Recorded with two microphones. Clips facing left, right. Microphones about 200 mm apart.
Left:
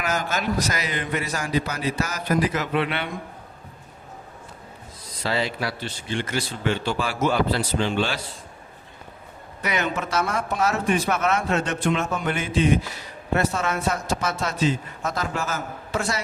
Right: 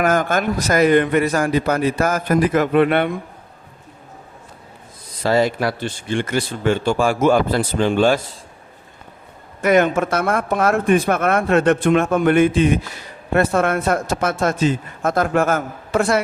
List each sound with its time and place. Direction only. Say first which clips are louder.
0.0 s speech: right 8 dB; 55° right (ahead or behind)
5.2 s speech: right 9 dB; 45° right (ahead or behind)
9.6 s a man's voice: right 11 dB; 50° right (ahead or behind)